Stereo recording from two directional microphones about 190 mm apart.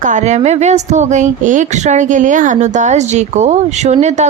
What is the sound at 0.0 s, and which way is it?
Speech, 40° right (ahead or behind).